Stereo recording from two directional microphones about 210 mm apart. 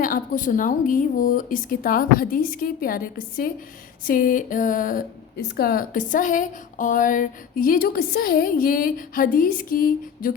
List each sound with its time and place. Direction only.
0.0 s a woman's voice: 40° left (ahead or behind)